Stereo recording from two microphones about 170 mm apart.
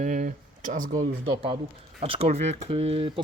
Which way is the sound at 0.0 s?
50° right (ahead or behind).